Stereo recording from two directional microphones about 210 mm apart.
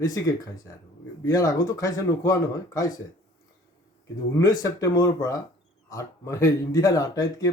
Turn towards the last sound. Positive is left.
turn(degrees=15)  # may be behind; listen again after turning